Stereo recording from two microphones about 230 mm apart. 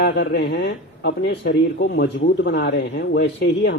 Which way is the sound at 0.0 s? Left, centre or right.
Left.